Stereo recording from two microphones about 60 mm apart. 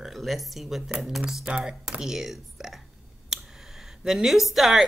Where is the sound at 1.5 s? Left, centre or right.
Centre.